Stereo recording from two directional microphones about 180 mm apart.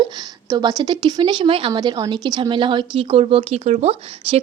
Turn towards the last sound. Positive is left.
turn(degrees=-35)  # may be behind; listen again after turning